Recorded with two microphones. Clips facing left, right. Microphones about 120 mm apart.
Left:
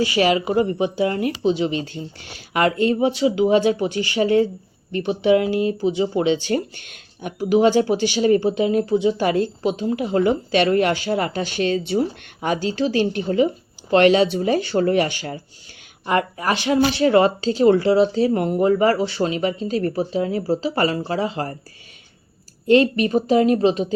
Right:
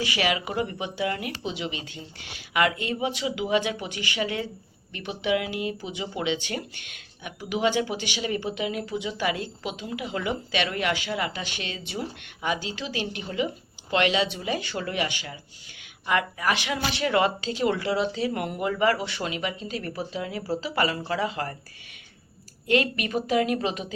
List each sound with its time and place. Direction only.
0.0 s speech: 35° left (ahead or behind)
22.6 s speech: 30° left (ahead or behind)